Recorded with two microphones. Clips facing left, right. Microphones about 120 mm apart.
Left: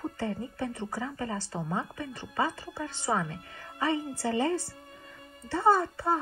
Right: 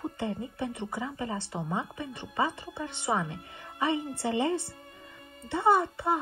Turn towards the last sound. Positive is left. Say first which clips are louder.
# even
turn(degrees=-20)  # may be behind; listen again after turning